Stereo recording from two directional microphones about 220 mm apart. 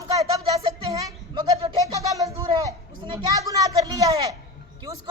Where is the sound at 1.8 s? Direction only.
15° right (ahead or behind).